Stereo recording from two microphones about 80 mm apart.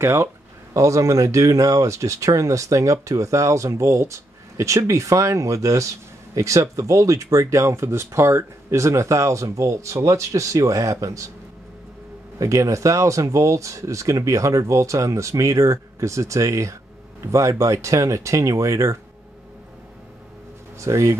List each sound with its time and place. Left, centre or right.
0.0 s speech: right
12.4 s speech: right
20.8 s speech: right